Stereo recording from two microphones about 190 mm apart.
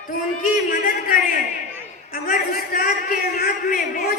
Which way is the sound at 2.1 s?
50° left (ahead or behind).